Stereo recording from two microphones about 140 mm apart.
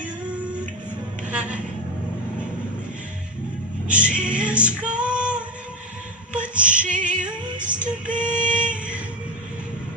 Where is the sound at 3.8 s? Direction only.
10° right (ahead or behind).